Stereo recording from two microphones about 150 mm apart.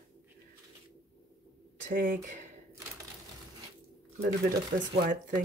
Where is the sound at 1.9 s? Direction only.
65° right (ahead or behind).